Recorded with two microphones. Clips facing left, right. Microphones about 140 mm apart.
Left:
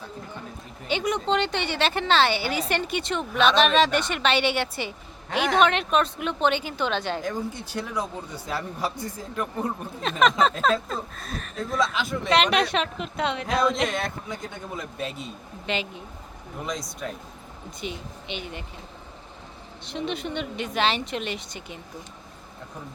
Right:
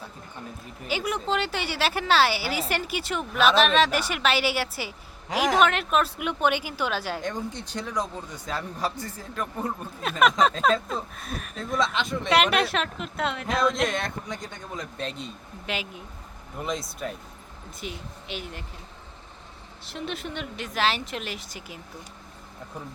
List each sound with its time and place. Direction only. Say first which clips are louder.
0.9 s a woman's voice: left 3 dB; 5° right (ahead or behind); by 9.7 s 10° left (ahead or behind)
10.0 s a woman's voice: even; 10° right (ahead or behind)
15.6 s a woman's voice: left 3 dB; 5° right (ahead or behind)
19.8 s a woman's voice: left 4 dB; 5° right (ahead or behind)